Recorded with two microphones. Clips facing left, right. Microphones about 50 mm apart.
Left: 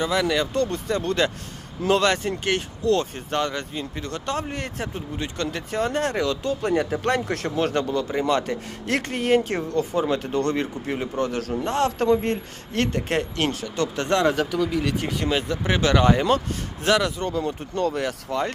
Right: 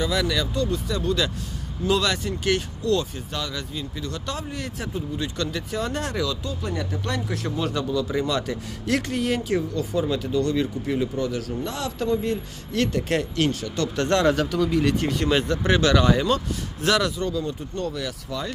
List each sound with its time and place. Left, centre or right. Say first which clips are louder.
0.0 s speech: left 2 dB; left
0.5 s speech: left 2 dB; left
6.6 s speech: left 6 dB; left
8.3 s speech: left 3 dB; left
12.7 s speech: even; left; by 15.9 s centre
15.9 s speech: left 4 dB; left
17.4 s speech: left 4 dB; left
18.3 s speech: left 6 dB; left